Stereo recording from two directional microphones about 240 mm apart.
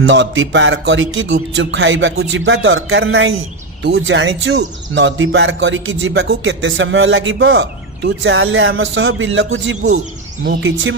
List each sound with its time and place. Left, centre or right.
0.0 s speech: right